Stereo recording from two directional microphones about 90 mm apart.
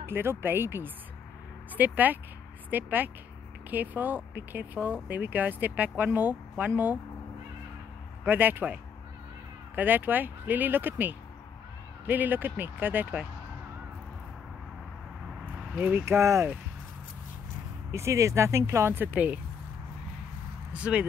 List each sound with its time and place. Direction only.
0.0 s speech: 25° right (ahead or behind)
8.3 s speech: 20° right (ahead or behind)
9.8 s speech: 20° right (ahead or behind)
15.7 s speech: 15° right (ahead or behind)
16.1 s speech: 30° right (ahead or behind)
17.9 s speech: 35° right (ahead or behind)
20.7 s speech: 15° right (ahead or behind)